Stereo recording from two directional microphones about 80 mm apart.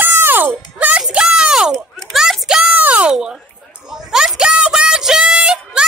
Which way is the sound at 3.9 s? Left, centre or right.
Centre.